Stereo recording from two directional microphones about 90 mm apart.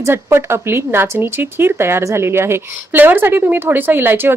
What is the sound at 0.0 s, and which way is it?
Speech, 25° right (ahead or behind).